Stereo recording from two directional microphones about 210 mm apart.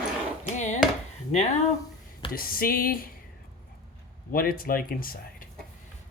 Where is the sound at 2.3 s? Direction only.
45° left (ahead or behind).